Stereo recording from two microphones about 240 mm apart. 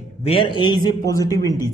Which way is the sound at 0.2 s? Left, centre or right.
Left.